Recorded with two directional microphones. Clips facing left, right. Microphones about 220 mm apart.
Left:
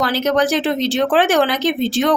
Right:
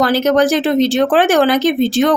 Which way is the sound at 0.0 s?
45° right (ahead or behind).